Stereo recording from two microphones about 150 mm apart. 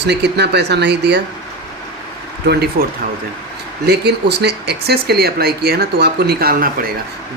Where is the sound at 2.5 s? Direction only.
90° right.